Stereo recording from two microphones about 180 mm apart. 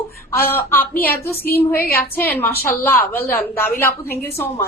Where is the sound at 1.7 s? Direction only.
55° left (ahead or behind).